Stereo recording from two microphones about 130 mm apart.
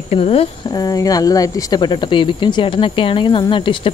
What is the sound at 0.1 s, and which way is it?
Speech, 50° left (ahead or behind).